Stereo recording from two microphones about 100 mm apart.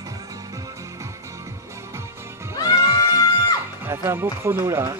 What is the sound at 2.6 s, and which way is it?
Music, 40° left (ahead or behind).